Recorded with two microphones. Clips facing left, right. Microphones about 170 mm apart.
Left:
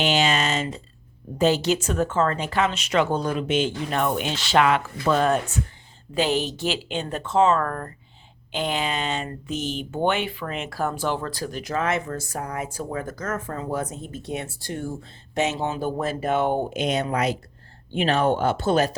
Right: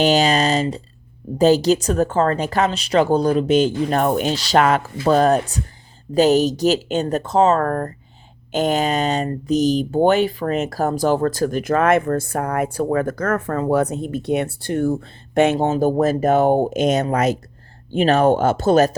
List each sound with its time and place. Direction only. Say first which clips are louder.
0.0 s speech: right 6 dB; 40° right (ahead or behind)